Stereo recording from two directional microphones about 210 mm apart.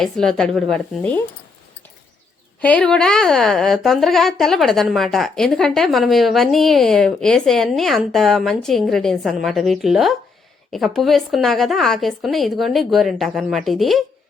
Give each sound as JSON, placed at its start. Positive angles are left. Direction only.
{"t": 0.0, "sound": "a woman's voice", "side_deg": 0}
{"t": 2.6, "sound": "a woman's voice", "side_deg": 5}